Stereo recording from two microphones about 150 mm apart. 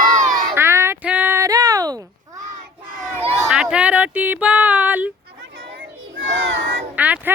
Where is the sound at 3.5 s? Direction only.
5° right (ahead or behind).